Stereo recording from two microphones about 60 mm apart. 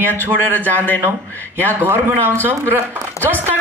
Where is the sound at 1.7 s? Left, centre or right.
Right.